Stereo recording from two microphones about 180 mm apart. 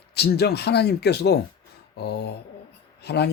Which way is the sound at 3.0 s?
65° left (ahead or behind).